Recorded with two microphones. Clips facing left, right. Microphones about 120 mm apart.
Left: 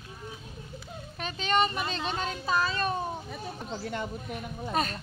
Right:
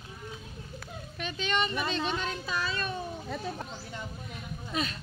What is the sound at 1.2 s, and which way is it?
Speech, 40° left (ahead or behind).